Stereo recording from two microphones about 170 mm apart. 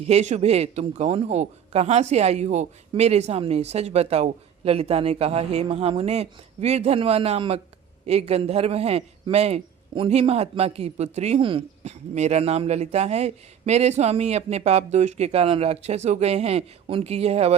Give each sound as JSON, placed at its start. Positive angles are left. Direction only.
{"t": 0.0, "sound": "a man's voice", "side_deg": -40}